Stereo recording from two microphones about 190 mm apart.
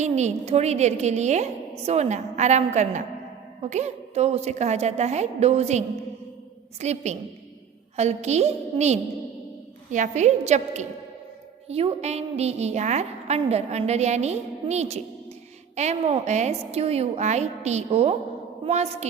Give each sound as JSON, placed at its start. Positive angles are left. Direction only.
{"t": 0.0, "sound": "a woman's voice", "side_deg": -35}